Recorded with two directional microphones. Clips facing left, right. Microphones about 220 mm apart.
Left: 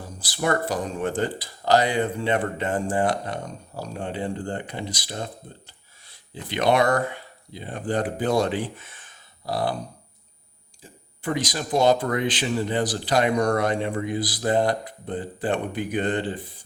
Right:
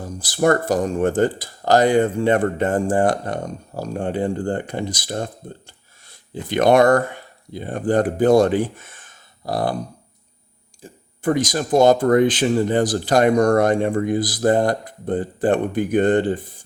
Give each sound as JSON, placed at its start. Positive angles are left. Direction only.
{"t": 0.2, "sound": "speech", "side_deg": -45}
{"t": 10.8, "sound": "speech", "side_deg": -50}